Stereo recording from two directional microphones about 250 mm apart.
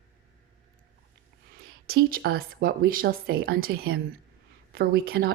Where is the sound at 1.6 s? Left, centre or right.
Right.